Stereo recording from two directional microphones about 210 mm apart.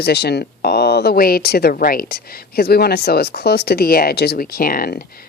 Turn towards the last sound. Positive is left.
turn(degrees=45)  # may be behind; listen again after turning